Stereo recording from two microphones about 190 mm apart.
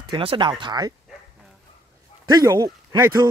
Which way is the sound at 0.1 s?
25° right (ahead or behind).